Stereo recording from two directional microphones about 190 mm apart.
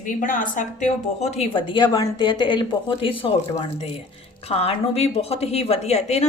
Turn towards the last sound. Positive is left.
turn(degrees=35)  # may be behind; listen again after turning